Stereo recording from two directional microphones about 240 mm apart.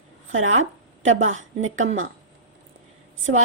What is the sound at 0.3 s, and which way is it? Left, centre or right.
A woman's voice, right.